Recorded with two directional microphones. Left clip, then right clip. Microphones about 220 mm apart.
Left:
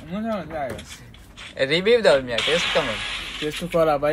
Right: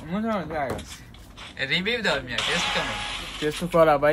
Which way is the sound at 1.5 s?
5° left (ahead or behind).